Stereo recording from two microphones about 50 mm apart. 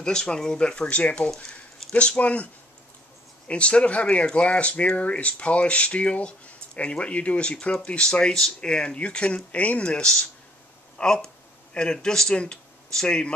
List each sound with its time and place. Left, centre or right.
0.0 s speech: centre